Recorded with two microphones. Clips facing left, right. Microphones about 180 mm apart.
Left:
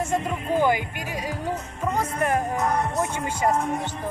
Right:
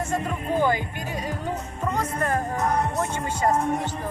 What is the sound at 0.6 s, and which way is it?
Speech, 15° left (ahead or behind).